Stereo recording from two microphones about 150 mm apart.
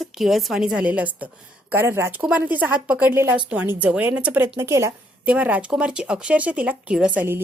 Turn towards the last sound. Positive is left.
turn(degrees=-10)  # may be behind; listen again after turning